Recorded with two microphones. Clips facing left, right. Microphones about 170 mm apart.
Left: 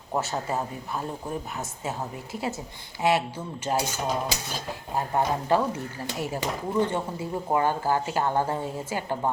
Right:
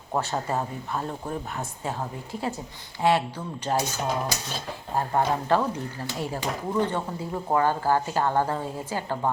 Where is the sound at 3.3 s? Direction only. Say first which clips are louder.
Right 1 dB; 10° left (ahead or behind).